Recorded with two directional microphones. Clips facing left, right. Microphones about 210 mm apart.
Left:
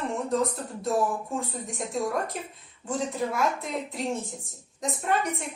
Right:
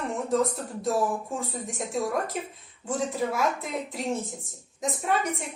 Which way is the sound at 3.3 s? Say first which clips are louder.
Even; centre (ahead or behind).